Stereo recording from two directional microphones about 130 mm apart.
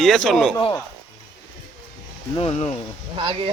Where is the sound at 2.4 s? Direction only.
50° left (ahead or behind).